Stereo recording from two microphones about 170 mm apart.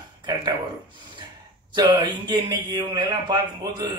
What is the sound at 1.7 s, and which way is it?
A man's voice, 25° right (ahead or behind).